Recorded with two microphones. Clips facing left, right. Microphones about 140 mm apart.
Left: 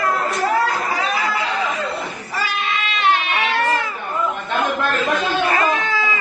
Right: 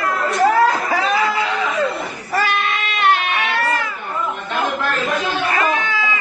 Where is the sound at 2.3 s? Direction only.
55° right (ahead or behind).